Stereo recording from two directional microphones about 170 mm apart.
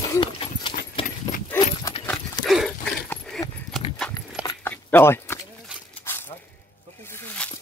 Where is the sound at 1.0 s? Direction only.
30° left (ahead or behind).